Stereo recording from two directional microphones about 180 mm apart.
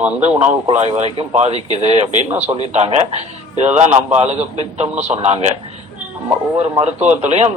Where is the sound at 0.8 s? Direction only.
35° right (ahead or behind).